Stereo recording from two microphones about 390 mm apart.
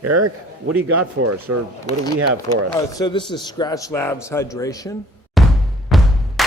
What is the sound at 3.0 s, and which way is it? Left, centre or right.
A man's voice, centre.